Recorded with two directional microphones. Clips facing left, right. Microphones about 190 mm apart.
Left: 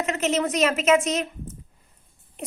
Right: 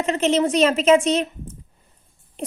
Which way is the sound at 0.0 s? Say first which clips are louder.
Right 5 dB; 30° right (ahead or behind).